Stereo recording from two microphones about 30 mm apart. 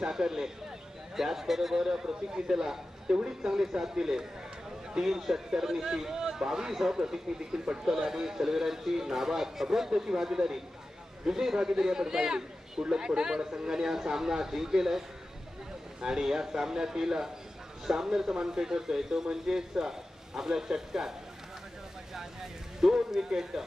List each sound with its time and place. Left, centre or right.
0.1 s a man's voice: centre
22.8 s speech: centre